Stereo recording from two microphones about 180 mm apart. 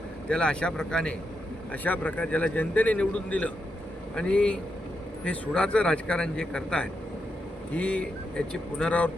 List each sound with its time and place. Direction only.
0.3 s a man's voice: 5° left (ahead or behind)